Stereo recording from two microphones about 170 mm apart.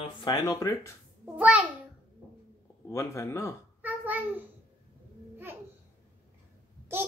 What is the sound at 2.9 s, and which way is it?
Speech, 15° left (ahead or behind).